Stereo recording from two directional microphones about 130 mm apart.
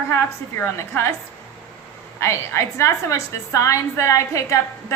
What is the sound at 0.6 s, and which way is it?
Speech, 20° left (ahead or behind).